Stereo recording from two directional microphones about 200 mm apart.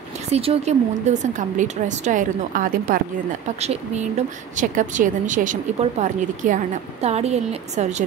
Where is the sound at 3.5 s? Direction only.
30° right (ahead or behind).